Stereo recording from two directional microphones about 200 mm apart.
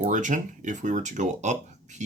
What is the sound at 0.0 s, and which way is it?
Speech, 40° right (ahead or behind).